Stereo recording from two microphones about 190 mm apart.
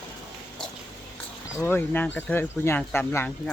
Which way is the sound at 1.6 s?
10° left (ahead or behind).